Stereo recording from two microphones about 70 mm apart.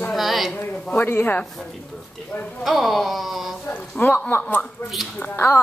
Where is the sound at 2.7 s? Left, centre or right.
Centre.